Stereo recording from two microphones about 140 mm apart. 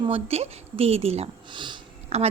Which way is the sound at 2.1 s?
50° right (ahead or behind).